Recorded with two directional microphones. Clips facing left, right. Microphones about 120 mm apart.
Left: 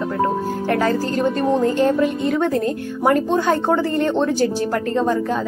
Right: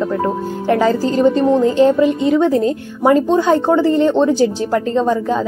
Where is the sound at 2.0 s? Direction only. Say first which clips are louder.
Right 5 dB; 15° right (ahead or behind).